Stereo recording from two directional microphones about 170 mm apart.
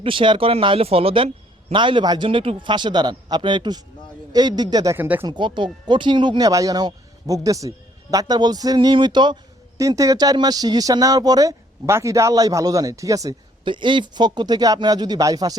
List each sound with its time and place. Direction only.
0.0 s a man's voice: 30° right (ahead or behind)
4.9 s speech: 10° right (ahead or behind)
5.2 s a man's voice: 25° right (ahead or behind)